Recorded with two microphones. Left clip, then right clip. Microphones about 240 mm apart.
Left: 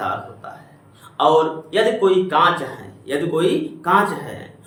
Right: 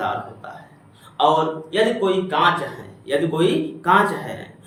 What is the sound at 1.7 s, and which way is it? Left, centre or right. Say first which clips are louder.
A man's voice: left 3 dB; centre.